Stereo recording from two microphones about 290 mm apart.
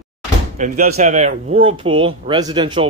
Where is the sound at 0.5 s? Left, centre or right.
Right.